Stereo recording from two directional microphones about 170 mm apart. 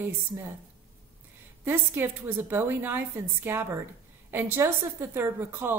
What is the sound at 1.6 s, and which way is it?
A woman's voice, 10° right (ahead or behind).